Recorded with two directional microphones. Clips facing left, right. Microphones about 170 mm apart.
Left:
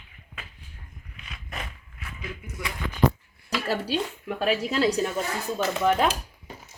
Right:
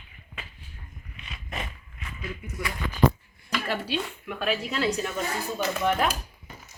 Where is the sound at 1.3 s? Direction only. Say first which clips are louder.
Right 2 dB; centre (ahead or behind).